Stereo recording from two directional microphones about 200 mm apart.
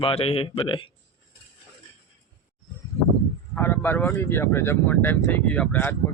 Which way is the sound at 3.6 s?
10° left (ahead or behind).